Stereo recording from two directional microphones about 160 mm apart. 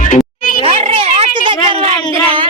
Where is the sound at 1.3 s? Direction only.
30° right (ahead or behind).